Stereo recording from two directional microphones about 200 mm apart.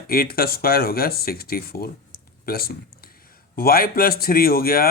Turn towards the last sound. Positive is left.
turn(degrees=45)  # may be behind; listen again after turning